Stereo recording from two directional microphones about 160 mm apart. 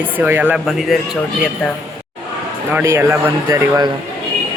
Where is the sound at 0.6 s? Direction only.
Centre (ahead or behind).